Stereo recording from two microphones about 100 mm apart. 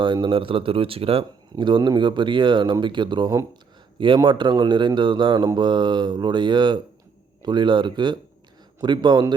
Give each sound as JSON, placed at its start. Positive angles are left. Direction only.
{"t": 0.0, "sound": "speech", "side_deg": -50}